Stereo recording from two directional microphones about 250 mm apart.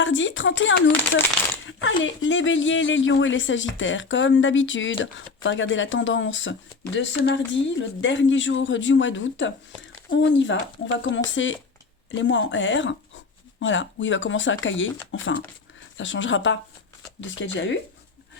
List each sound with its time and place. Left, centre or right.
0.0 s speech: left